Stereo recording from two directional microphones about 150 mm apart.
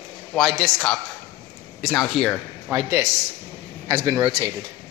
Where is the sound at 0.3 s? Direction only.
5° left (ahead or behind).